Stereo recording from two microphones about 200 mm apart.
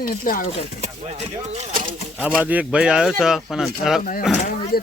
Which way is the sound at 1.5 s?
40° right (ahead or behind).